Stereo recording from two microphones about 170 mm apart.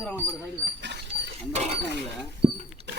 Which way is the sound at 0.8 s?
80° right.